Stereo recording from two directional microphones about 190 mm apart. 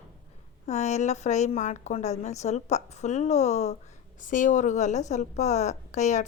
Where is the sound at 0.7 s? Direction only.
40° left (ahead or behind).